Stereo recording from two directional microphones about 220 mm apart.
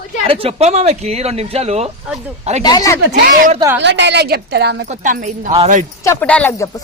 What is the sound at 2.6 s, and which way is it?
Speech, 15° left (ahead or behind).